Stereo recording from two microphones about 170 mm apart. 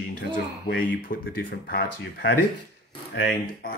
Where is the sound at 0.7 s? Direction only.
60° left (ahead or behind).